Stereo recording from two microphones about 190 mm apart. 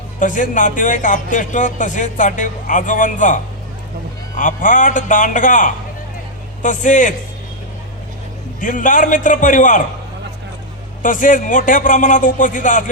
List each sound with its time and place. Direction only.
0.2 s a man's voice: 40° left (ahead or behind)
8.6 s speech: 45° left (ahead or behind)
11.0 s speech: 45° left (ahead or behind)